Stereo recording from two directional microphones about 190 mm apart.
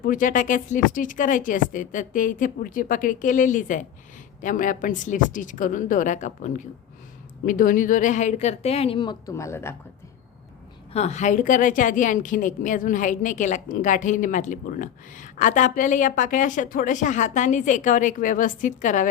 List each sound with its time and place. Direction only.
0.0 s a woman's voice: 45° left (ahead or behind); by 9.7 s 15° left (ahead or behind)
10.9 s a woman's voice: 35° left (ahead or behind)